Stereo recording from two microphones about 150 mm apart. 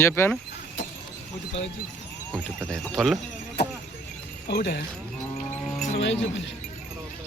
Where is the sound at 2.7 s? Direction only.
5° left (ahead or behind).